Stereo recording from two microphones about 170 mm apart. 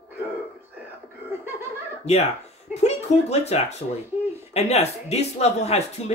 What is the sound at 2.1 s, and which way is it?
Speech, 35° left (ahead or behind).